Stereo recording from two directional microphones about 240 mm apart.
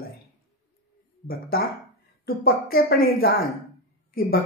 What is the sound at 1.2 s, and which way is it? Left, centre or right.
Speech, left.